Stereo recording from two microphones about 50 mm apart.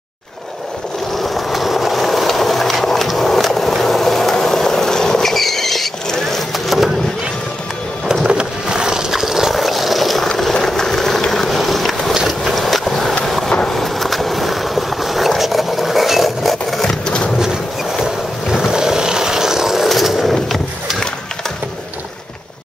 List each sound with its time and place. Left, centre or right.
1.1 s vehicle: centre
8.1 s skateboard: centre
10.2 s vehicle: centre
13.7 s skateboard: centre
17.0 s a sound: centre
18.0 s vehicle: centre
19.9 s a sound: centre